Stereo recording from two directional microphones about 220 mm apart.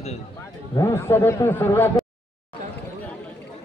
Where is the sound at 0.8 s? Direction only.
10° left (ahead or behind).